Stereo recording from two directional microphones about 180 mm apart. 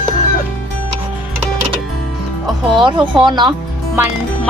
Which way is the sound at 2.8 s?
25° right (ahead or behind).